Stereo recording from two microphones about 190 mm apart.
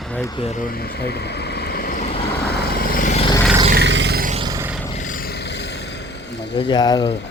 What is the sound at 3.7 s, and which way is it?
Roar, 65° right (ahead or behind).